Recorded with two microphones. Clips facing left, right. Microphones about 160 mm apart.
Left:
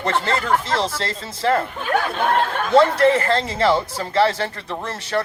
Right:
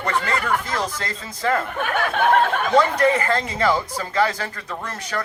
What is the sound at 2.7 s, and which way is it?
Speech, 30° left (ahead or behind).